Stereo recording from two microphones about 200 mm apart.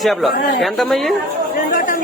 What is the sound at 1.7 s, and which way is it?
Chatter, 45° left (ahead or behind).